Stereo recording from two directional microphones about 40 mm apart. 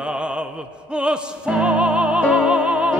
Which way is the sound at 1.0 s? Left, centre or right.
Right.